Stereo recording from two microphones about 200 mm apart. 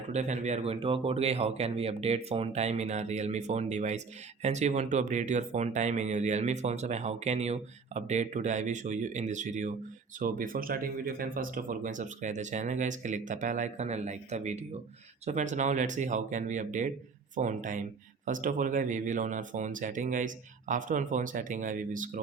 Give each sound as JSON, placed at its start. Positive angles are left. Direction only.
{"t": 0.1, "sound": "speech", "side_deg": -35}